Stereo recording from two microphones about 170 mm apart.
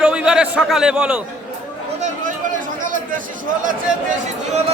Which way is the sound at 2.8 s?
50° right (ahead or behind).